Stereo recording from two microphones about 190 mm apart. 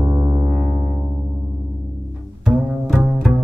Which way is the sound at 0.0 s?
10° right (ahead or behind).